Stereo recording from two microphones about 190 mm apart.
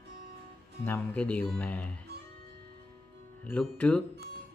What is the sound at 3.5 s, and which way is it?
Speech, 5° left (ahead or behind).